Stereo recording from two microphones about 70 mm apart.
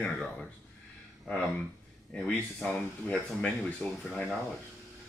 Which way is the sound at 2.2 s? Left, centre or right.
Centre.